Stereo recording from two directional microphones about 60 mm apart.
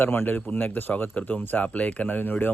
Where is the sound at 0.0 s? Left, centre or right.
Left.